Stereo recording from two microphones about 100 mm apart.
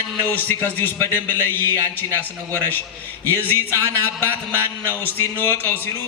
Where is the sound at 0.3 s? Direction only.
15° left (ahead or behind).